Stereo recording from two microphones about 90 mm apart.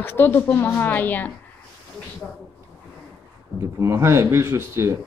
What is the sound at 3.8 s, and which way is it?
Speech, 30° right (ahead or behind).